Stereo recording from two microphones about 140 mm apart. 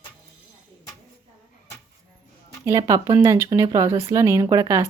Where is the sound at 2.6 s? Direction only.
25° right (ahead or behind).